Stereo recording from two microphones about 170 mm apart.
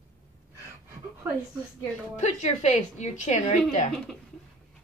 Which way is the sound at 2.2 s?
45° left (ahead or behind).